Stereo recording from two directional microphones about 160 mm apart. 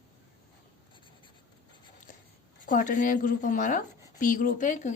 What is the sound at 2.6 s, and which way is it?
Speech, 55° left (ahead or behind).